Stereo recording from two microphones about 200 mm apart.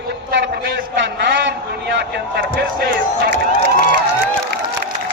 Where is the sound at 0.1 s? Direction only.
60° right (ahead or behind).